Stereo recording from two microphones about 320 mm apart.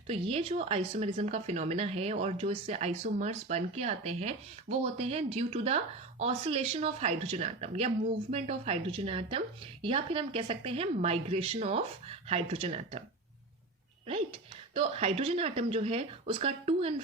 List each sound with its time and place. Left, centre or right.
0.1 s speech: centre
14.8 s speech: centre